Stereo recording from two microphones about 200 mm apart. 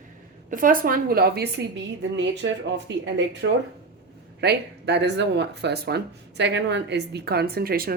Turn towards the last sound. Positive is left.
turn(degrees=-50)  # may be behind; listen again after turning